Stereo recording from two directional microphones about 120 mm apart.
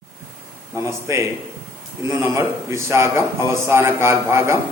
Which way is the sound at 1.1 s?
25° right (ahead or behind).